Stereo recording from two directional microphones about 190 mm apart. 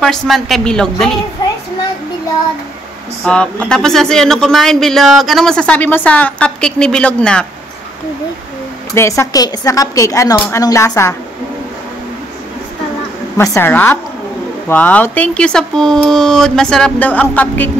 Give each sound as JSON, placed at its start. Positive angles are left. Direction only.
{"t": 0.0, "sound": "speech", "side_deg": 0}
{"t": 3.3, "sound": "speech", "side_deg": 5}
{"t": 8.9, "sound": "a woman's voice", "side_deg": 15}
{"t": 13.4, "sound": "a woman's voice", "side_deg": 15}